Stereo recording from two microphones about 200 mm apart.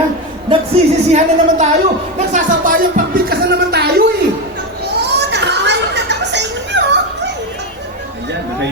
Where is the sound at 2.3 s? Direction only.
45° right (ahead or behind).